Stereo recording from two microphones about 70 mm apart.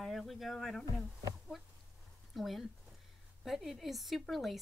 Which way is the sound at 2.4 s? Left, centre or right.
Centre.